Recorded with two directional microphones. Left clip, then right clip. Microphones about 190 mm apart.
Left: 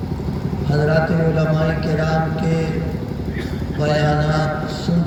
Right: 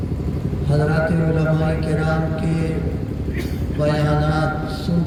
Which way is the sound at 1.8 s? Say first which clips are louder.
Left 1 dB; 45° right (ahead or behind).